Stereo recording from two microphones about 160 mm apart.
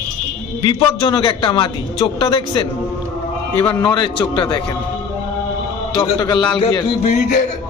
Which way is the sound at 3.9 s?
30° left (ahead or behind).